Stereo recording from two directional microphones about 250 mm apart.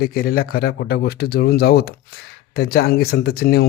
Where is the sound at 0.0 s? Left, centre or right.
Left.